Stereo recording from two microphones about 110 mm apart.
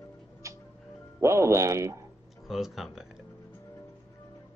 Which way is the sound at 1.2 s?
25° right (ahead or behind).